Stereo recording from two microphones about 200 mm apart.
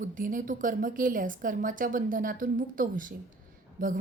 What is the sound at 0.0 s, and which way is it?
A woman's voice, 40° right (ahead or behind).